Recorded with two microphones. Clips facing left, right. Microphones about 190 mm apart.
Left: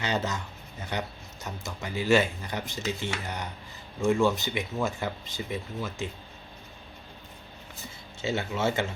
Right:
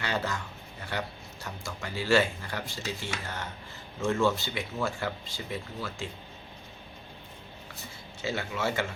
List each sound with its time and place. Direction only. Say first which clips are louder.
0.0 s speech: left 2 dB; 20° left (ahead or behind)
8.2 s speech: left 3 dB; 25° left (ahead or behind)